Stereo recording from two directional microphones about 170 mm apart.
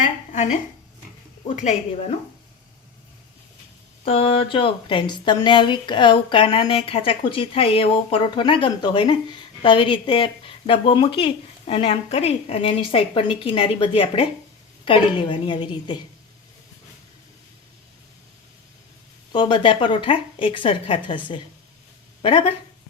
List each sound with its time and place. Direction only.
1.5 s speech: 45° left (ahead or behind)
4.0 s speech: 35° left (ahead or behind)
19.3 s speech: 25° left (ahead or behind)
22.2 s speech: 35° left (ahead or behind)